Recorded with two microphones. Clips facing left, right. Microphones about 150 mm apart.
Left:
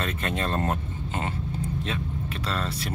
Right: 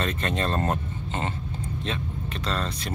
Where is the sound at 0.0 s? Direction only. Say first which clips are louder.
Right 2 dB; 5° left (ahead or behind).